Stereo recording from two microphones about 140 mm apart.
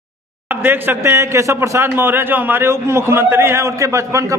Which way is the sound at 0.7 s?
15° right (ahead or behind).